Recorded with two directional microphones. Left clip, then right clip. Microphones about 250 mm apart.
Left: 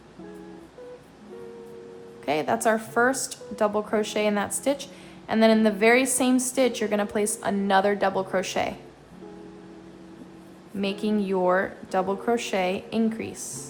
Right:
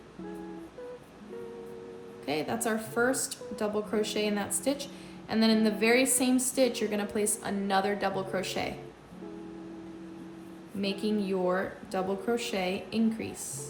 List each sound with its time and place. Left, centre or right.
2.2 s a woman's voice: centre
10.8 s a woman's voice: centre